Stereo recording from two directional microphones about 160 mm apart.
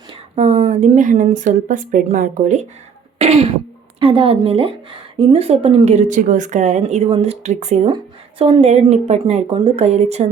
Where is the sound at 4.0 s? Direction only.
35° right (ahead or behind).